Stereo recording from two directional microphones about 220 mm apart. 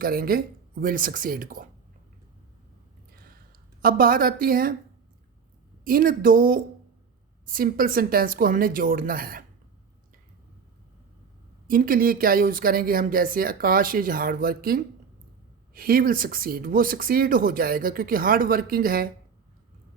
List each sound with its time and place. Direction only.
0.0 s speech: 40° right (ahead or behind)
3.8 s speech: 40° right (ahead or behind)
5.8 s speech: 40° right (ahead or behind)
11.7 s speech: 40° right (ahead or behind)